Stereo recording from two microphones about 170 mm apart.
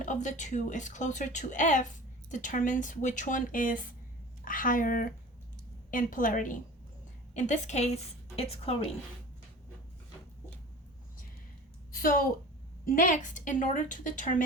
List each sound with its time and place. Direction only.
0.0 s a woman's voice: 45° left (ahead or behind)
11.9 s a woman's voice: 55° left (ahead or behind)